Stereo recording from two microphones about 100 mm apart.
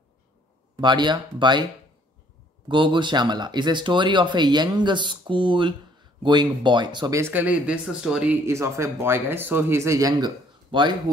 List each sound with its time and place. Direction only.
0.7 s speech: 50° right (ahead or behind)
2.7 s speech: 55° right (ahead or behind)
7.1 s speech: 25° right (ahead or behind)
7.3 s speech: 10° right (ahead or behind)
8.5 s speech: 30° right (ahead or behind); by 10.9 s 50° right (ahead or behind)